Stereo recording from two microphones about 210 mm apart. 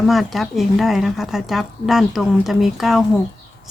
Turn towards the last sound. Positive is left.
turn(degrees=0)  # may be behind; listen again after turning